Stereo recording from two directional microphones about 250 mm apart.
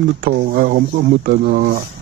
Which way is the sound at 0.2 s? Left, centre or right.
Right.